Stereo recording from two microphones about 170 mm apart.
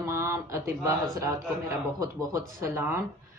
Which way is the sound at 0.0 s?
15° right (ahead or behind).